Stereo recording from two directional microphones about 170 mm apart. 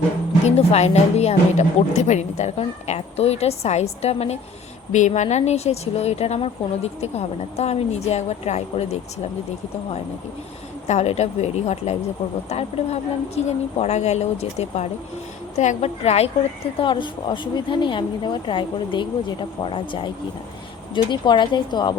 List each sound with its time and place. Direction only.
0.4 s speech: 40° left (ahead or behind)
10.8 s speech: 40° left (ahead or behind)